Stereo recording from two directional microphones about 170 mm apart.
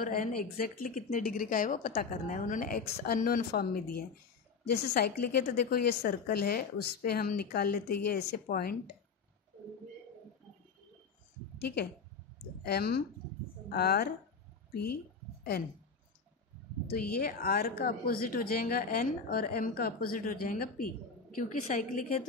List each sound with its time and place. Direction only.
0.0 s a woman's voice: 55° left (ahead or behind)
11.5 s speech: 75° left (ahead or behind)
16.8 s a woman's voice: 60° left (ahead or behind)
21.4 s a woman's voice: 45° left (ahead or behind)